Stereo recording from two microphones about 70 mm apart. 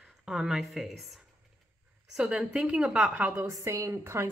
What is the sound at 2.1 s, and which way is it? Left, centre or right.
A woman's voice, centre.